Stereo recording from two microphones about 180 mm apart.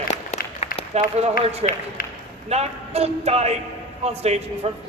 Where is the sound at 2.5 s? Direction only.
35° right (ahead or behind).